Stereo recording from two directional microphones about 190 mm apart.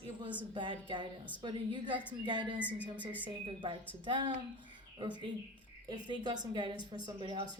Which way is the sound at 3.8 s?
10° left (ahead or behind).